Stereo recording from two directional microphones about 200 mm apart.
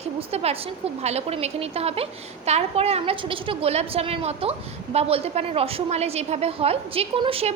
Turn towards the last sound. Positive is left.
turn(degrees=-25)  # may be behind; listen again after turning